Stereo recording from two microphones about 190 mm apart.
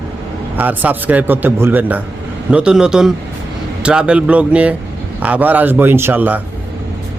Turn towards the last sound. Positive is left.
turn(degrees=-10)  # may be behind; listen again after turning